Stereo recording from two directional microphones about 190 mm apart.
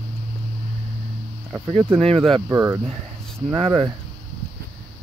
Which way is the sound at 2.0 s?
30° right (ahead or behind).